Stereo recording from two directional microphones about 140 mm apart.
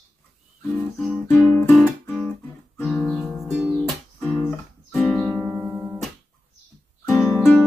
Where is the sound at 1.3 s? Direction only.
20° left (ahead or behind).